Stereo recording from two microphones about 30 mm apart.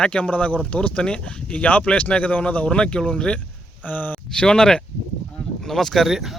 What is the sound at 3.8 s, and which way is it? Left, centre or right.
Speech, left.